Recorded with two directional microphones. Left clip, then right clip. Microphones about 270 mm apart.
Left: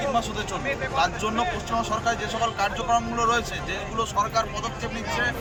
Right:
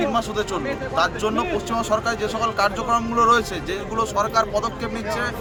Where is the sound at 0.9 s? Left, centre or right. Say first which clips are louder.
Right 4 dB; centre.